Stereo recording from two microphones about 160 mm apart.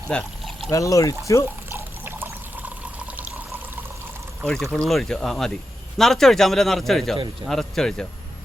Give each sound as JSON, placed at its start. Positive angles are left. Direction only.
{"t": 0.1, "sound": "pour", "side_deg": 5}
{"t": 0.7, "sound": "speech", "side_deg": 20}
{"t": 1.7, "sound": "pour", "side_deg": -15}
{"t": 3.2, "sound": "water", "side_deg": -10}
{"t": 4.4, "sound": "speech", "side_deg": 5}